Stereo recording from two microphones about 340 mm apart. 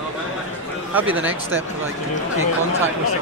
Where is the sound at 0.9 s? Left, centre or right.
Centre.